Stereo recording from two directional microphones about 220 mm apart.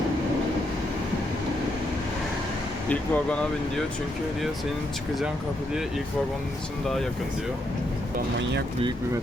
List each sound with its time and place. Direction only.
2.9 s speech: 5° left (ahead or behind)